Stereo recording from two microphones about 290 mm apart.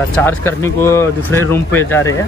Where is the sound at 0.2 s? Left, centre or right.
Centre.